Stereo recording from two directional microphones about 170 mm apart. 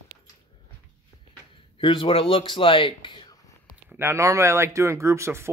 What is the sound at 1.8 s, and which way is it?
Speech, 30° left (ahead or behind).